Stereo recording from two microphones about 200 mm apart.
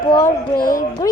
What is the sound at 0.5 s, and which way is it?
Speech, 45° left (ahead or behind).